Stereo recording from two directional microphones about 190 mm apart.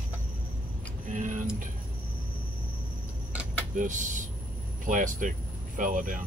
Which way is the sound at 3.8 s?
40° right (ahead or behind).